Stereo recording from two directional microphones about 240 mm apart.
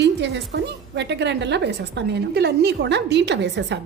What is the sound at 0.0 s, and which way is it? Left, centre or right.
A woman's voice, right.